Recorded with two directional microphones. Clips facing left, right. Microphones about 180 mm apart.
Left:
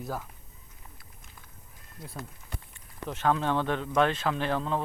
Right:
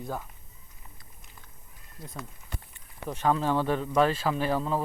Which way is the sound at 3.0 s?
10° right (ahead or behind).